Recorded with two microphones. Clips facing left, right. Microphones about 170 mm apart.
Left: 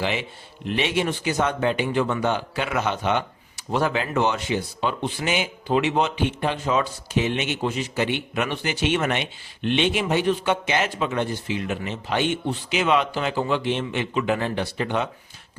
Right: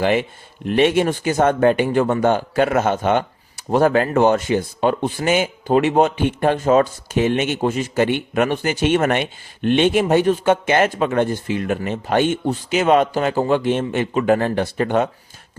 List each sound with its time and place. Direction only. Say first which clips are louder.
0.0 s speech: right 8 dB; 50° right (ahead or behind)